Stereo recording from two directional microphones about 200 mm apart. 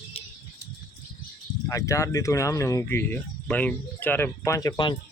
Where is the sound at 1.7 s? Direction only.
15° left (ahead or behind).